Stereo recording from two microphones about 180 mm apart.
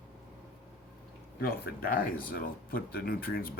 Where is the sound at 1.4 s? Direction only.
60° left (ahead or behind).